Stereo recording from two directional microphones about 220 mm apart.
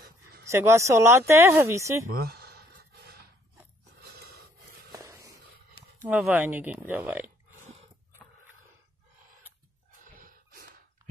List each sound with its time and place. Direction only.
0.5 s speech: 15° right (ahead or behind)
2.1 s a sound: 45° right (ahead or behind)
4.0 s gasp: 45° right (ahead or behind)
4.9 s walk: 15° right (ahead or behind)
6.0 s speech: 5° right (ahead or behind)